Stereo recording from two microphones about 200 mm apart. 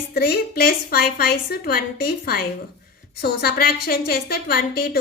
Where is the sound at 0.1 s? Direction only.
50° left (ahead or behind).